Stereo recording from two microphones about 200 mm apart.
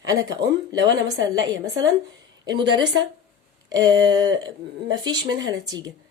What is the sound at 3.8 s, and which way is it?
Speech, 20° right (ahead or behind).